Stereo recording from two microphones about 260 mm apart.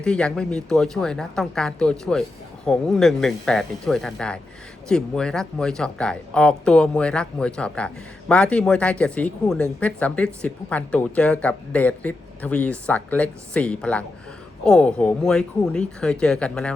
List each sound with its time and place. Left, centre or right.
0.0 s speech: centre